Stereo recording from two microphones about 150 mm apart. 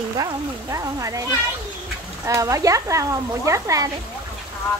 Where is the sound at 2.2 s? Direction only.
20° right (ahead or behind).